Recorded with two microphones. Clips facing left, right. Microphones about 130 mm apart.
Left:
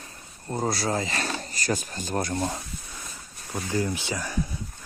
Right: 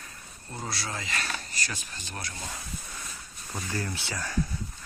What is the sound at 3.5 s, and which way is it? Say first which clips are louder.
Speech: left 7 dB; 15° left (ahead or behind).